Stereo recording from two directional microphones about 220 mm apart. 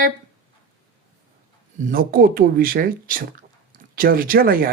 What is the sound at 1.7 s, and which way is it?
A woman's voice, 40° right (ahead or behind).